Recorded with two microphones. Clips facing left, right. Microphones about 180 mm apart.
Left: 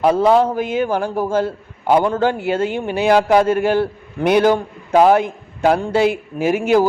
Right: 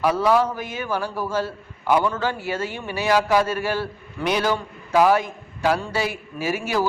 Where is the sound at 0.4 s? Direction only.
55° left (ahead or behind).